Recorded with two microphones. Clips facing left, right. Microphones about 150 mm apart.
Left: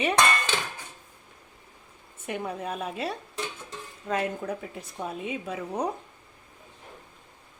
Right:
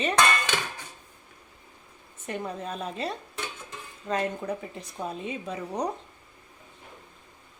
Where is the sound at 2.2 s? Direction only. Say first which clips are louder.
Left 1 dB; 10° left (ahead or behind).